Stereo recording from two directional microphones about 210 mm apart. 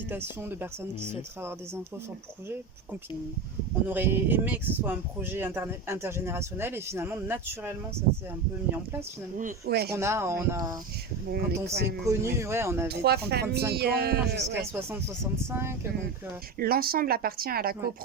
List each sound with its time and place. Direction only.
0.1 s speech: 10° right (ahead or behind)
3.8 s speech: 10° right (ahead or behind)
9.4 s speech: 50° right (ahead or behind)
9.9 s speech: 15° right (ahead or behind)
11.7 s speech: 55° right (ahead or behind)
12.0 s speech: 15° right (ahead or behind)
12.9 s speech: 50° right (ahead or behind)
14.6 s speech: 10° right (ahead or behind)
16.6 s speech: 45° right (ahead or behind)